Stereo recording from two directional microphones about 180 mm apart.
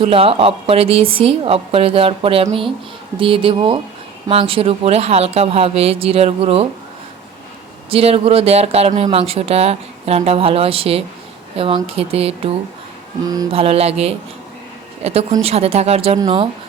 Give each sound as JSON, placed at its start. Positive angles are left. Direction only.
{"t": 0.0, "sound": "a woman's voice", "side_deg": -30}
{"t": 7.9, "sound": "a woman's voice", "side_deg": -35}
{"t": 13.2, "sound": "speech", "side_deg": -20}
{"t": 13.5, "sound": "a woman's voice", "side_deg": -35}